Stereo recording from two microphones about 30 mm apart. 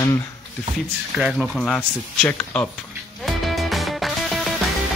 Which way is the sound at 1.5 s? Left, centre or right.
Centre.